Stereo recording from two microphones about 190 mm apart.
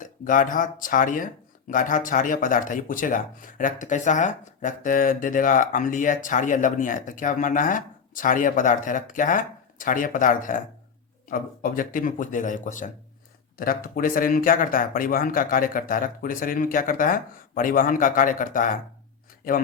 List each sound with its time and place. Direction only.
0.0 s speech: 45° left (ahead or behind)